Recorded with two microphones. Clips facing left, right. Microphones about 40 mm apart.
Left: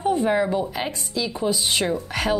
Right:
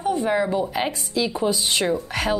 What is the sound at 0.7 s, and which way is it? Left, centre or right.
Speech, centre.